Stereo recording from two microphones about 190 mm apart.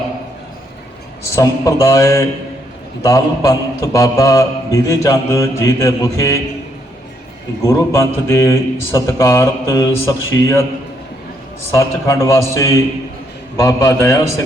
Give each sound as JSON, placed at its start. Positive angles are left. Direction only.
{"t": 1.3, "sound": "a man's voice", "side_deg": 15}
{"t": 7.6, "sound": "a man's voice", "side_deg": 15}
{"t": 11.7, "sound": "a man's voice", "side_deg": 15}